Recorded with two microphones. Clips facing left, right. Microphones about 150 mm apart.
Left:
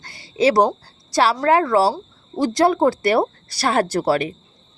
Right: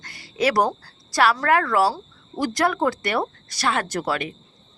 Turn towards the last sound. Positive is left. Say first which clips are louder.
# left 7 dB
turn(degrees=35)  # may be behind; listen again after turning